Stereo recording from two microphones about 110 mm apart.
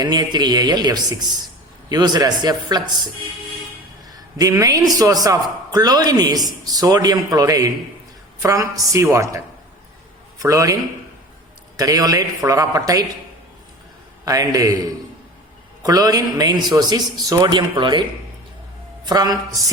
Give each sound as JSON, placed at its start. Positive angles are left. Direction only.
{"t": 0.0, "sound": "a man's voice", "side_deg": -40}
{"t": 4.4, "sound": "a man's voice", "side_deg": -30}
{"t": 11.8, "sound": "a man's voice", "side_deg": -35}
{"t": 14.3, "sound": "a man's voice", "side_deg": -30}
{"t": 15.8, "sound": "a man's voice", "side_deg": -35}
{"t": 19.0, "sound": "a man's voice", "side_deg": -35}